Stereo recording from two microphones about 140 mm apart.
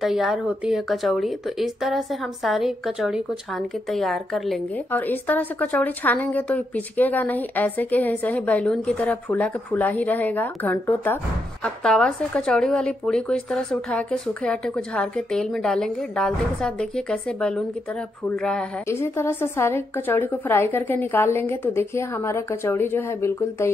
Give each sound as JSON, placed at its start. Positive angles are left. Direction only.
{"t": 0.0, "sound": "speech", "side_deg": -5}
{"t": 4.9, "sound": "a woman's voice", "side_deg": 10}
{"t": 18.9, "sound": "a woman's voice", "side_deg": 20}